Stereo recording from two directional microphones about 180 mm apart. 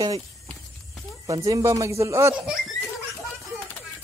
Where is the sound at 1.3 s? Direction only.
20° right (ahead or behind).